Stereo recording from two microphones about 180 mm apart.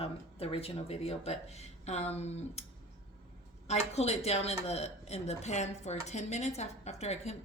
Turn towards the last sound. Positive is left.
turn(degrees=35)  # may be behind; listen again after turning